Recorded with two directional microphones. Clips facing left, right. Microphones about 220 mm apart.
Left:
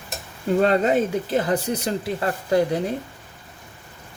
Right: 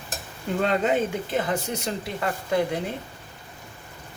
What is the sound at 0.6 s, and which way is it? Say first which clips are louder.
Speech: left 4 dB; 40° left (ahead or behind).